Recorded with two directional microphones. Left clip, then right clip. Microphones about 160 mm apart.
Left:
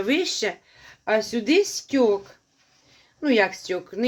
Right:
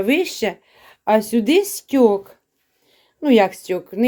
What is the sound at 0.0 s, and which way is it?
Speech, 40° right (ahead or behind).